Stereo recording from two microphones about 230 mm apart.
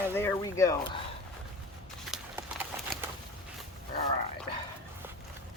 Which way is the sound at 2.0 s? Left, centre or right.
Centre.